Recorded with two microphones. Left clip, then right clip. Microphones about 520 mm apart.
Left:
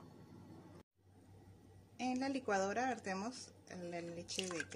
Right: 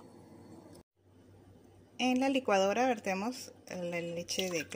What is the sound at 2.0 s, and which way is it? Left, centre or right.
Speech, left.